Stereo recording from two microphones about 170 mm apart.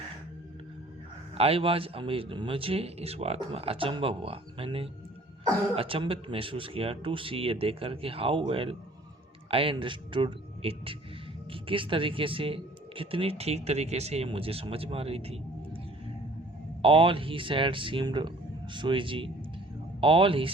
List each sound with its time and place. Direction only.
1.4 s speech: 35° right (ahead or behind)
16.8 s speech: 30° right (ahead or behind)